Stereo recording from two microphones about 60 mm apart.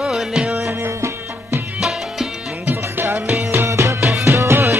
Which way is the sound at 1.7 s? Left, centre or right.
Centre.